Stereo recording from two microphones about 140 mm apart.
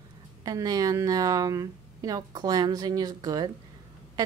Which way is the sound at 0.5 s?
25° right (ahead or behind).